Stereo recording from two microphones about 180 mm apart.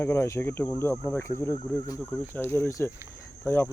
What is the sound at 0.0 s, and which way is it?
Speech, 15° left (ahead or behind).